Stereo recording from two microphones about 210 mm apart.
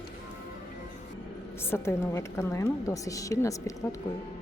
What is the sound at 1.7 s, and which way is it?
A woman's voice, 15° left (ahead or behind).